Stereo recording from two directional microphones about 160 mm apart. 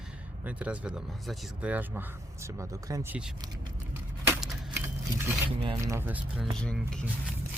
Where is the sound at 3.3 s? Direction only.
25° right (ahead or behind).